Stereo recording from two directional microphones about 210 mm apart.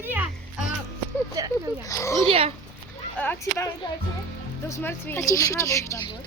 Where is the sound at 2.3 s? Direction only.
25° right (ahead or behind).